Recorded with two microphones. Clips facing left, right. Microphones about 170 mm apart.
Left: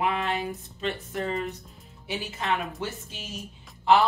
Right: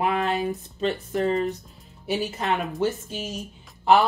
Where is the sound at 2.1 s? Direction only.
40° right (ahead or behind).